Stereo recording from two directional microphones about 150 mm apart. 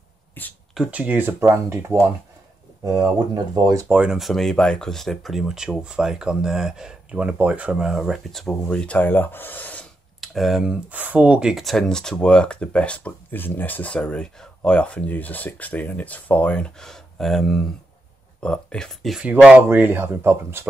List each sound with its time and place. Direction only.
0.3 s a sound: 10° left (ahead or behind)
0.7 s speech: 10° right (ahead or behind)
3.3 s speech: 25° right (ahead or behind)
3.9 s speech: 5° right (ahead or behind)